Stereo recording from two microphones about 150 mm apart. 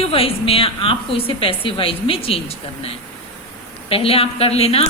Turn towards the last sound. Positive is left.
turn(degrees=40)  # may be behind; listen again after turning